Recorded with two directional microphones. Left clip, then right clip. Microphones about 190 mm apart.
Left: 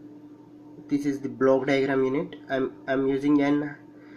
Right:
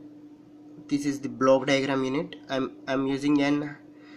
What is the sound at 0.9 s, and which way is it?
Speech, 5° right (ahead or behind).